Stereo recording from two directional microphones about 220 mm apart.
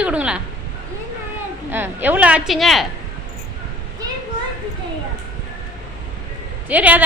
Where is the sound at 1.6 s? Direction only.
10° right (ahead or behind).